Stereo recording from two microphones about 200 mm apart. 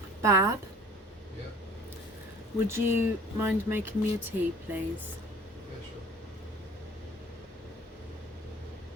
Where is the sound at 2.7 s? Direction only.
10° right (ahead or behind).